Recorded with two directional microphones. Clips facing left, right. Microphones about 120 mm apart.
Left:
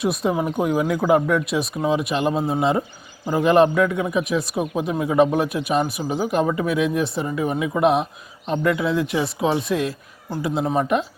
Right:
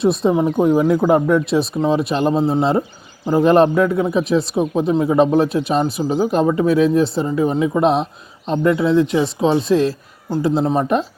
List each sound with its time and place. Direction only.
0.0 s speech: 25° right (ahead or behind)